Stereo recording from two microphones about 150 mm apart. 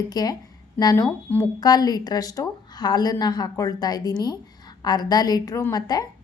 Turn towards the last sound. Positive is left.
turn(degrees=25)  # may be behind; listen again after turning